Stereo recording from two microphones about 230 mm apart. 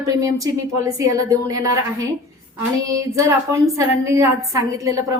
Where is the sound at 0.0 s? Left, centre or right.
Centre.